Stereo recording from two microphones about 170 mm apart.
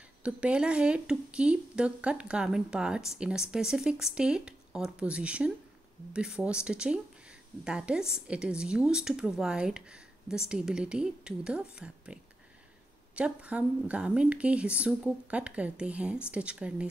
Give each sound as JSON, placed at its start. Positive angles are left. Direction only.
{"t": 0.2, "sound": "speech", "side_deg": -5}